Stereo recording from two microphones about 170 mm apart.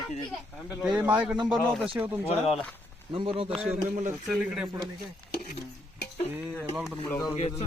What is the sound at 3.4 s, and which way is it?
Speech, 5° right (ahead or behind).